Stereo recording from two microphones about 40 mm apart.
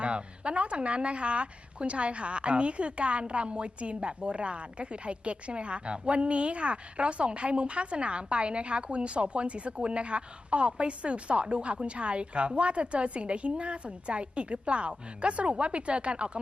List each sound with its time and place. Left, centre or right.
0.0 s a woman's voice: right